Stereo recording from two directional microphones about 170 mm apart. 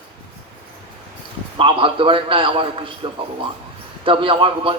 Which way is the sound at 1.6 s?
30° right (ahead or behind).